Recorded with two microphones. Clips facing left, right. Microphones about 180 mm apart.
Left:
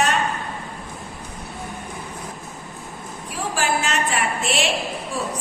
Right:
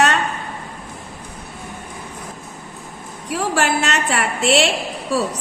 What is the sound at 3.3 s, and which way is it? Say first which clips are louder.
A woman's voice: right 4 dB; 75° right (ahead or behind).